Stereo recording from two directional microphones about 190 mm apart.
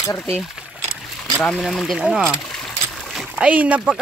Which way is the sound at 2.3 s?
5° left (ahead or behind).